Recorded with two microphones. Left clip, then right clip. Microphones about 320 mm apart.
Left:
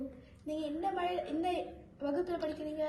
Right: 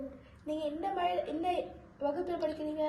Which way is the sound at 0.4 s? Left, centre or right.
Centre.